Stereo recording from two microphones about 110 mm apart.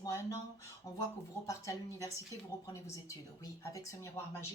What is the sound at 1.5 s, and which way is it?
Speech, 30° left (ahead or behind).